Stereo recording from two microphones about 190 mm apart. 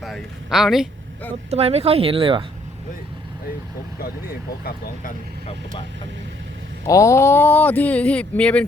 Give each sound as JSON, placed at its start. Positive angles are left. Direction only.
{"t": 0.0, "sound": "a sound", "side_deg": 0}
{"t": 1.5, "sound": "speech", "side_deg": -35}
{"t": 4.0, "sound": "speech", "side_deg": 50}
{"t": 6.8, "sound": "speech", "side_deg": 15}